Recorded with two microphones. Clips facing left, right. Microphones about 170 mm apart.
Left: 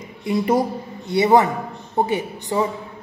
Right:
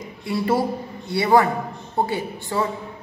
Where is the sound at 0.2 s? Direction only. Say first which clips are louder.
Left 2 dB; 20° left (ahead or behind).